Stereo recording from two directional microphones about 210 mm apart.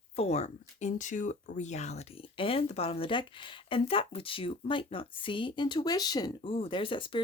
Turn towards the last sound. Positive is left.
turn(degrees=25)  # may be behind; listen again after turning